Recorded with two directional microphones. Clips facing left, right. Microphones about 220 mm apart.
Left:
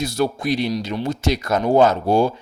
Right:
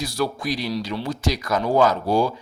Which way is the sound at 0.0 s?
25° left (ahead or behind).